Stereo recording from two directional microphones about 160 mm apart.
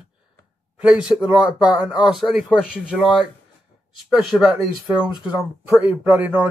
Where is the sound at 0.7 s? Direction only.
5° right (ahead or behind).